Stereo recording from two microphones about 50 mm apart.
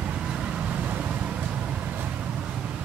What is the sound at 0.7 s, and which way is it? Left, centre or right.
Vehicle, right.